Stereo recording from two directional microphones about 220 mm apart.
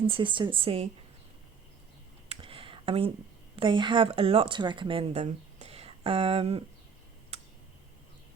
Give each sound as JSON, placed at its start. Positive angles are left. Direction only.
{"t": 0.0, "sound": "a woman's voice", "side_deg": -25}
{"t": 2.3, "sound": "a sound", "side_deg": -25}
{"t": 3.5, "sound": "speech", "side_deg": -20}